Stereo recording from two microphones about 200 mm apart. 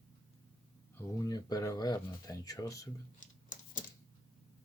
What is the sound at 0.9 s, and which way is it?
Speech, 15° left (ahead or behind).